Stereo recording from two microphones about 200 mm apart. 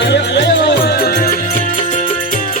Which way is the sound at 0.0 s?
60° left (ahead or behind).